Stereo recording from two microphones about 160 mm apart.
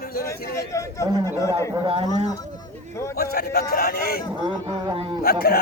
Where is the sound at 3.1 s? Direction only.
70° left (ahead or behind).